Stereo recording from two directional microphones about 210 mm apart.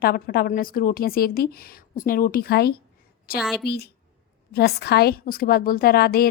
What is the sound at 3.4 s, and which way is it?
Speech, centre (ahead or behind).